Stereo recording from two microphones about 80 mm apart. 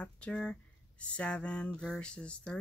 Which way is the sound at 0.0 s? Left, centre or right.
Centre.